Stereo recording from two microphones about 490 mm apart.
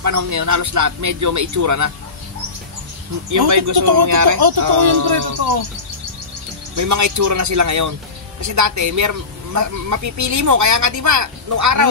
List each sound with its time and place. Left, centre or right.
0.0 s speech: right
3.3 s speech: right
4.0 s speech: right
6.8 s speech: right